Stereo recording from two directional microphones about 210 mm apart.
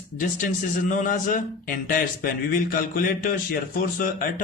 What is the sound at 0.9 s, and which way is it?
A man's voice, 40° left (ahead or behind).